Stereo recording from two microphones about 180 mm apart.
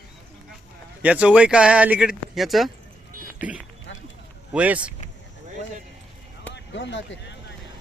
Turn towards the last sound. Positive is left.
turn(degrees=80)